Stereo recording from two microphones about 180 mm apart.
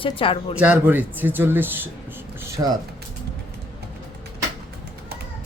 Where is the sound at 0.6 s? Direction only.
10° right (ahead or behind).